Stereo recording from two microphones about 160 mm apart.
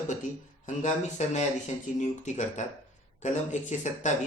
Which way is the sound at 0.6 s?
50° left (ahead or behind).